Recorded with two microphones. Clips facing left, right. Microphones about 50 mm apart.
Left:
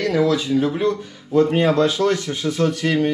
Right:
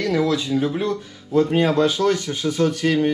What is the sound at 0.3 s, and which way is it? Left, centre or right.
Speech, left.